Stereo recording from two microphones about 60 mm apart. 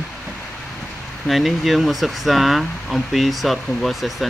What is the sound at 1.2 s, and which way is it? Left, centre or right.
Speech, centre.